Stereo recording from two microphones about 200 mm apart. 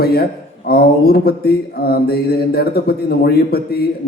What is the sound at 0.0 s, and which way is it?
A man's voice, 50° left (ahead or behind).